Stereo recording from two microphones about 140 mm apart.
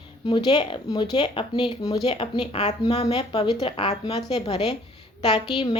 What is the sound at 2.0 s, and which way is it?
Speech, 45° left (ahead or behind).